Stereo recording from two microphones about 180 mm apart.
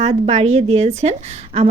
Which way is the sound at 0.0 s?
35° right (ahead or behind).